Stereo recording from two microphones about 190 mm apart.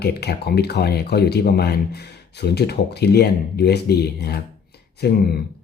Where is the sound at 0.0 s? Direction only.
60° left (ahead or behind).